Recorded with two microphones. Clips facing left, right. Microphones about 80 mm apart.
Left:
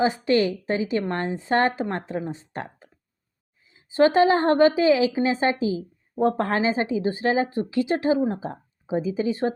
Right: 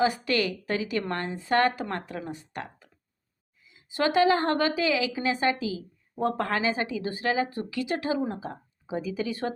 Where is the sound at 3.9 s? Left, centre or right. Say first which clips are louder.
Left 5 dB; left.